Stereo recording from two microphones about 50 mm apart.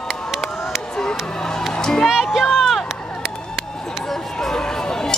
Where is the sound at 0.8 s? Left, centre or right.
Centre.